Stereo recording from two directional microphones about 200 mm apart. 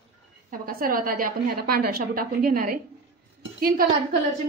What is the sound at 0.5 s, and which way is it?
A woman's voice, 45° right (ahead or behind).